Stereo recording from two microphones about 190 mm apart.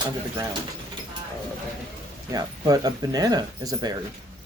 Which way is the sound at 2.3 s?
20° right (ahead or behind).